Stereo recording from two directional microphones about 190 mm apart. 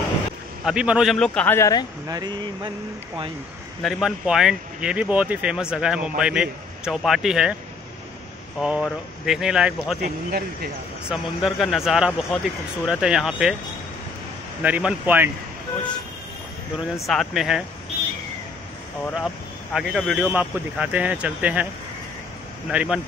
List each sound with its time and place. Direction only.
0.7 s speech: 5° right (ahead or behind); by 1.9 s 15° left (ahead or behind)
2.0 s speech: 20° right (ahead or behind)
3.8 s speech: centre (ahead or behind)
8.5 s speech: 5° right (ahead or behind)
10.0 s speech: 50° right (ahead or behind)
11.1 s speech: centre (ahead or behind)
14.6 s speech: 5° right (ahead or behind)
17.0 s speech: centre (ahead or behind)
19.1 s speech: centre (ahead or behind)
22.7 s speech: 5° right (ahead or behind)